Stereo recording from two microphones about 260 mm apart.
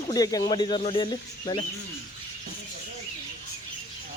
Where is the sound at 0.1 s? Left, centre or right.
Centre.